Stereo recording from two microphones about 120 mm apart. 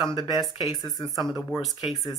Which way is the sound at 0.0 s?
40° left (ahead or behind).